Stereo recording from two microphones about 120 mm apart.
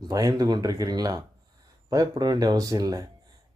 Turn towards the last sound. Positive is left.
turn(degrees=-30)  # may be behind; listen again after turning